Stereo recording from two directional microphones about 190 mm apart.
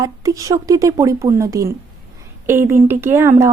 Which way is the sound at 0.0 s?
20° right (ahead or behind).